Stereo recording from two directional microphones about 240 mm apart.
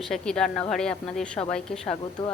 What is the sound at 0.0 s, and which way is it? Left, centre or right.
Speech, centre.